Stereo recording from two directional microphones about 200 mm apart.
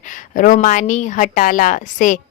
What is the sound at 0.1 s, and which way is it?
A woman's voice, 40° left (ahead or behind).